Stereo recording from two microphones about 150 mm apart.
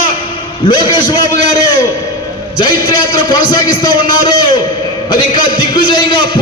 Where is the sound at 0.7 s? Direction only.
30° left (ahead or behind).